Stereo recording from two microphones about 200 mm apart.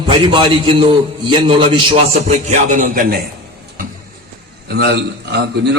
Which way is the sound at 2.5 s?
40° right (ahead or behind).